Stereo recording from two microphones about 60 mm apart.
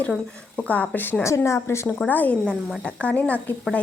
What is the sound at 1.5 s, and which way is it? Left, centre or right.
Speech, left.